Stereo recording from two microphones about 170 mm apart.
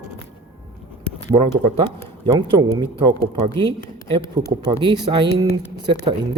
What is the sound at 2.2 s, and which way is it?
Speech, 25° right (ahead or behind).